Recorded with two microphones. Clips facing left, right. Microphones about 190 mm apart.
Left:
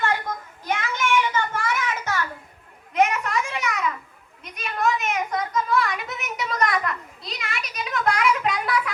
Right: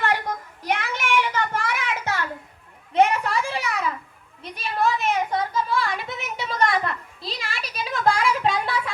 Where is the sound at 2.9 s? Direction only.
30° right (ahead or behind).